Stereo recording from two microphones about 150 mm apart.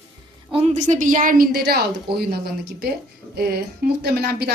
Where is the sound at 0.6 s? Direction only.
55° right (ahead or behind); by 2.2 s 90° right.